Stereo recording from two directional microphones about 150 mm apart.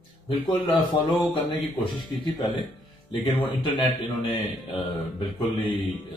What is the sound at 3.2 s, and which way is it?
Speech, 30° left (ahead or behind).